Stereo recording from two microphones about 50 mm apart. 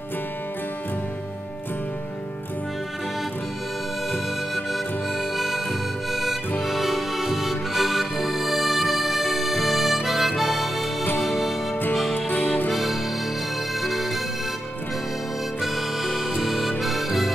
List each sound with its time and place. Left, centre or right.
4.7 s harmonica: centre
6.6 s music: centre
10.0 s harmonica: centre
11.1 s music: centre
12.3 s music: left
12.7 s music: centre
15.6 s music: centre